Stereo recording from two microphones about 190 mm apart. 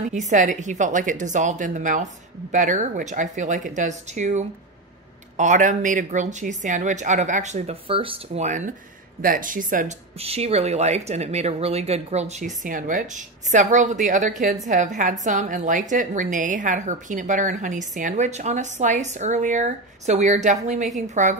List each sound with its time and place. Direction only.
0.1 s a woman's voice: 40° right (ahead or behind)